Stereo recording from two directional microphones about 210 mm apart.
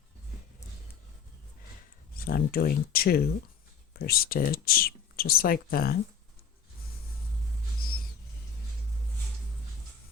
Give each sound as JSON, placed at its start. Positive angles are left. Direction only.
{"t": 2.1, "sound": "speech", "side_deg": 45}